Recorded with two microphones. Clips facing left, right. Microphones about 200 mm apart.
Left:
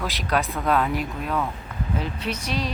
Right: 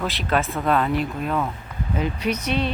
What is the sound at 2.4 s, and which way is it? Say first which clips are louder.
Speech: right 3 dB; 35° left (ahead or behind).